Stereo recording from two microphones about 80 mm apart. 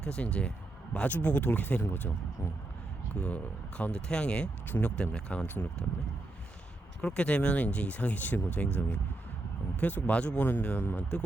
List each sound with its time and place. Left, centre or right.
0.0 s speech: centre
7.0 s speech: centre
9.8 s speech: centre